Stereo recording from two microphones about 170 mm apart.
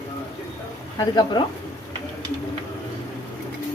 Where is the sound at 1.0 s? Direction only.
25° left (ahead or behind).